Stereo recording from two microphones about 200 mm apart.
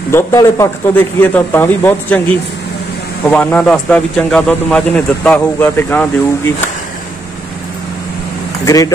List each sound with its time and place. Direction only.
0.1 s speech: 15° left (ahead or behind)
8.6 s speech: 20° left (ahead or behind)